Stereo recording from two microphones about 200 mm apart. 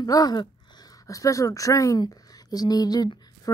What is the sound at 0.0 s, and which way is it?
Speech, 20° left (ahead or behind).